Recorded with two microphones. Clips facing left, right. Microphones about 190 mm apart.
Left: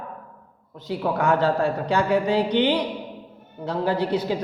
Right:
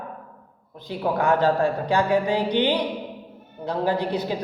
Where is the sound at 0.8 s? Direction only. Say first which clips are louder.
Even; 15° right (ahead or behind).